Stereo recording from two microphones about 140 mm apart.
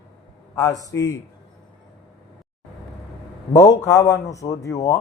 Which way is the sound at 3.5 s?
25° left (ahead or behind).